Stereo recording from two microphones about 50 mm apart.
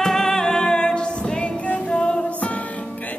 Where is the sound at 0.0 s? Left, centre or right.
Centre.